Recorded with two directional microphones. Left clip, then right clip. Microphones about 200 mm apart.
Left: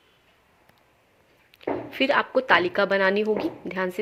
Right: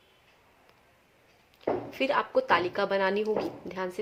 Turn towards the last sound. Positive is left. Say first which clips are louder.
# left 6 dB
turn(degrees=20)  # may be behind; listen again after turning